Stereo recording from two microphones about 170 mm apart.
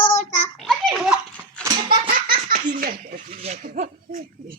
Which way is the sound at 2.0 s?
55° right (ahead or behind).